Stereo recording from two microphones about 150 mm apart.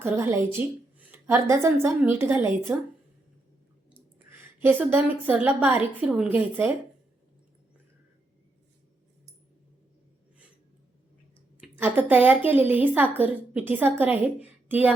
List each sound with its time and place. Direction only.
0.0 s a woman's voice: 15° right (ahead or behind)
3.9 s a woman's voice: 15° right (ahead or behind)
11.8 s a woman's voice: 10° right (ahead or behind)